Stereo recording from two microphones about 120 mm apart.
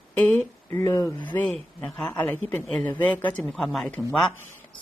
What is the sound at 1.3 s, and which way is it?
A woman's voice, 10° left (ahead or behind).